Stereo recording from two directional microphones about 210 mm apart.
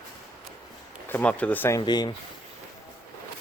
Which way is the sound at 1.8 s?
20° left (ahead or behind).